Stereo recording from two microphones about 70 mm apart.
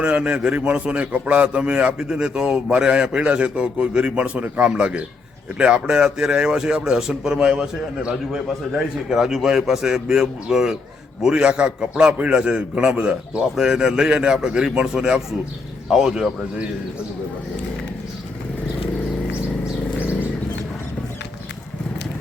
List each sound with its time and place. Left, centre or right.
0.0 s a man's voice: centre